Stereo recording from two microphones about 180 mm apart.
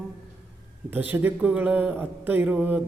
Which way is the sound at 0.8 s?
10° right (ahead or behind).